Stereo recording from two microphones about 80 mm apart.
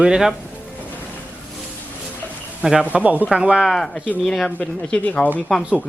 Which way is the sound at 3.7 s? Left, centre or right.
Centre.